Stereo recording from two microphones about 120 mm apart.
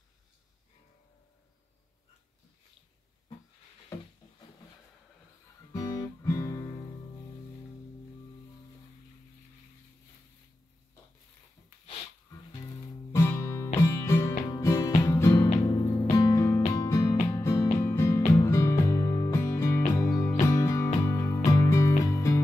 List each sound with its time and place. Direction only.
5.7 s guitar: 25° left (ahead or behind)
13.1 s music: 25° left (ahead or behind)